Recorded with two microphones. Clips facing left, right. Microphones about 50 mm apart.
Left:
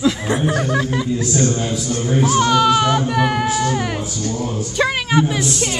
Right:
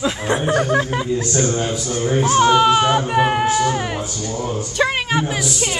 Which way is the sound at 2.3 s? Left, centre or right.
Centre.